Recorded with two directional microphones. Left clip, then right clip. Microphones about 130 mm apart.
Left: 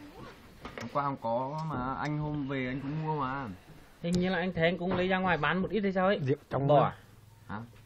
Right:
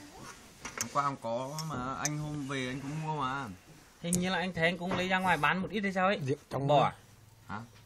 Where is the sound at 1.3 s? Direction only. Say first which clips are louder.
Left 4 dB; 50° right (ahead or behind).